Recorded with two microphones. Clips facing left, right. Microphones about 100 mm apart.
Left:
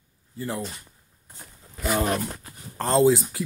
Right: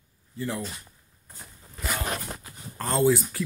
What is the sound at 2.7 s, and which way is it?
Speech, 30° left (ahead or behind).